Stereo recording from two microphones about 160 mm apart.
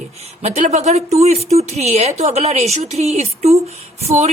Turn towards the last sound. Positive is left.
turn(degrees=-40)  # may be behind; listen again after turning